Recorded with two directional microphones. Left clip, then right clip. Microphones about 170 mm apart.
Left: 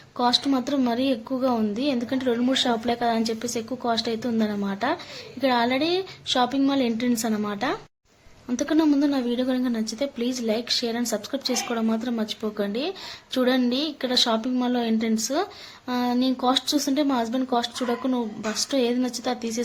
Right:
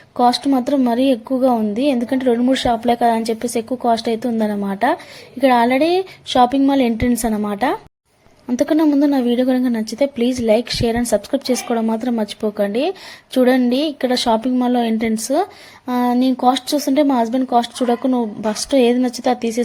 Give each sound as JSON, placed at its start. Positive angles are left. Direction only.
{"t": 0.2, "sound": "a woman's voice", "side_deg": -30}